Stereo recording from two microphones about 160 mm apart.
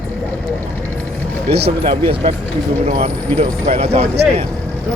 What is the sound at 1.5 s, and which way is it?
Speech, 90° right.